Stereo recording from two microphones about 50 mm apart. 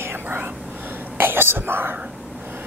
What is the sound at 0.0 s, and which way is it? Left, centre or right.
Whispering, right.